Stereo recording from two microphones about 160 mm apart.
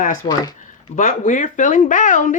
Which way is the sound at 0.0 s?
60° left (ahead or behind).